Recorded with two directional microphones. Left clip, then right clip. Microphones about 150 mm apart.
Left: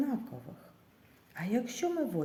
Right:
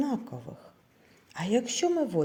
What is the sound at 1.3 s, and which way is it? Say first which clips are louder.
Speech: right 7 dB; 50° right (ahead or behind).